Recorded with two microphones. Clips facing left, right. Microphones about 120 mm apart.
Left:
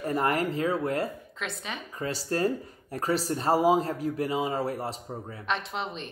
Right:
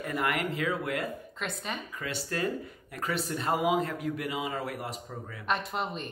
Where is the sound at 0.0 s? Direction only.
35° left (ahead or behind).